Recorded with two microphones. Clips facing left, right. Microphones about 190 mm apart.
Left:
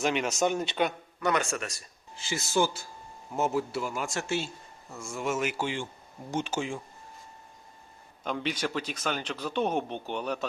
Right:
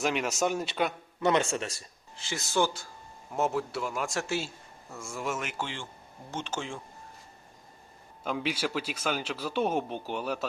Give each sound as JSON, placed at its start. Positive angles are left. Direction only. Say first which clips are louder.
{"t": 0.0, "sound": "a man's voice", "louder": "left 1 dB", "side_deg": 0}
{"t": 1.2, "sound": "speech", "louder": "right 2 dB", "side_deg": -25}
{"t": 2.1, "sound": "a man's voice", "louder": "left 1 dB", "side_deg": 0}
{"t": 8.2, "sound": "a man's voice", "louder": "even", "side_deg": -5}